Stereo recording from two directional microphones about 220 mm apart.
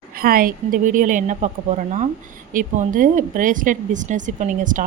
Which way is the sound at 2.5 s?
40° right (ahead or behind).